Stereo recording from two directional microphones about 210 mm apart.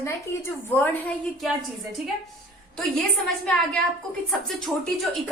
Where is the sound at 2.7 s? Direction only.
Centre (ahead or behind).